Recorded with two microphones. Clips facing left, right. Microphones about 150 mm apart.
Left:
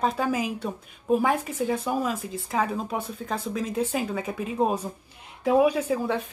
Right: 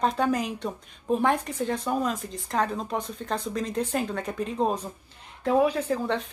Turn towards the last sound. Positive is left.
turn(degrees=5)  # may be behind; listen again after turning